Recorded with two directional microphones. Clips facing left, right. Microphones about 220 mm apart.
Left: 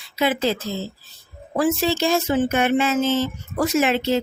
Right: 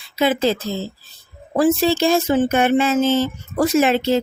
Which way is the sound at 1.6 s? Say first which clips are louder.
Right 4 dB; 30° right (ahead or behind).